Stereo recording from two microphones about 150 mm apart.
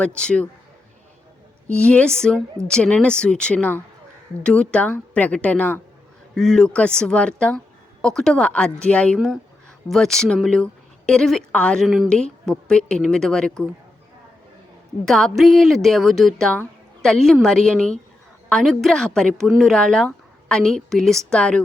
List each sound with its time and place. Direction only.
0.2 s speech: 5° left (ahead or behind)
1.6 s speech: 10° left (ahead or behind)
15.0 s speech: centre (ahead or behind)